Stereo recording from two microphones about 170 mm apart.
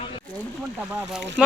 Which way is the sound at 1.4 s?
Centre (ahead or behind).